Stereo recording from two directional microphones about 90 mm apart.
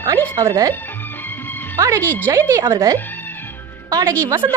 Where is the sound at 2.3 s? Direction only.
30° right (ahead or behind).